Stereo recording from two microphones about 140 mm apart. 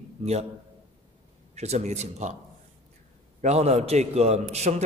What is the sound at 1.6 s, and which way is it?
Speech, 50° right (ahead or behind).